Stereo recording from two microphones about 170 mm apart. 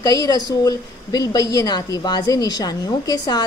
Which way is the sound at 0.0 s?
20° left (ahead or behind).